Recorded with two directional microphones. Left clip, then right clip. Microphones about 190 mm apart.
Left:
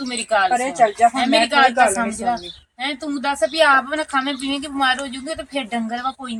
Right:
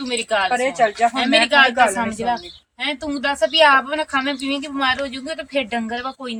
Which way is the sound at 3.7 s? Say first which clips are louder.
Right 1 dB; 10° right (ahead or behind).